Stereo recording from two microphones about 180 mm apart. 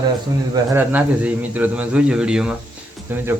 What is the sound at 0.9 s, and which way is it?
Speech, 10° right (ahead or behind).